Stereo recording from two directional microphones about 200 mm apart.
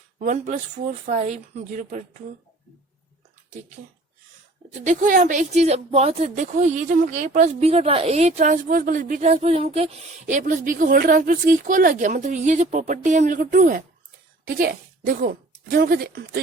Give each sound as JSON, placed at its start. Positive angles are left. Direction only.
{"t": 0.2, "sound": "speech", "side_deg": -40}
{"t": 4.7, "sound": "a woman's voice", "side_deg": -40}